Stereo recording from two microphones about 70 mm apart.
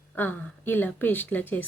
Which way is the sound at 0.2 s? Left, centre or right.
Left.